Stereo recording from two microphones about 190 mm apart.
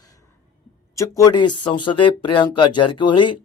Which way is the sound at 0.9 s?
20° left (ahead or behind).